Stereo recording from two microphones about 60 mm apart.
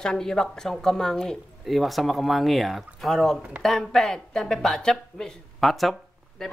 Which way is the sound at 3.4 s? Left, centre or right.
Centre.